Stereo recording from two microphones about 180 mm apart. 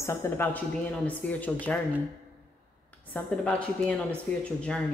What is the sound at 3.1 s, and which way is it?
A woman's voice, 5° left (ahead or behind).